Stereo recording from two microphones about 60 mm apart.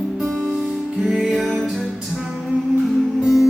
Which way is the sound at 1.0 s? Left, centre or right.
Centre.